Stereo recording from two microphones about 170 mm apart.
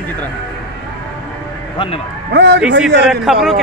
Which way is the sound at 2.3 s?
90° right.